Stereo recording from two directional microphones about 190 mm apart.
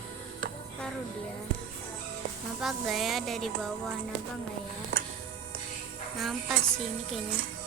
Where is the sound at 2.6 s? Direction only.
Centre (ahead or behind).